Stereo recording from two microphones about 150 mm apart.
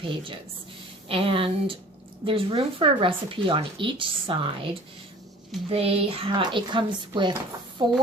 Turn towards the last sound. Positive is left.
turn(degrees=-30)  # may be behind; listen again after turning